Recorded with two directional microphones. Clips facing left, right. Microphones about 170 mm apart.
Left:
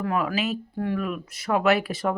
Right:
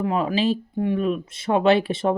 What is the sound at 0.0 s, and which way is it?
Speech, 20° right (ahead or behind).